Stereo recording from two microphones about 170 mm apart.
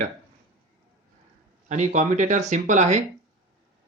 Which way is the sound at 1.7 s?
45° right (ahead or behind).